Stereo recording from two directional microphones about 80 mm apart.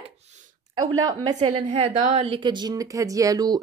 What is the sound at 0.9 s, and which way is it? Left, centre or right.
A woman's voice, right.